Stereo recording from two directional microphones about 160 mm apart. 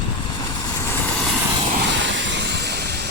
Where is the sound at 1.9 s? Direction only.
90° right.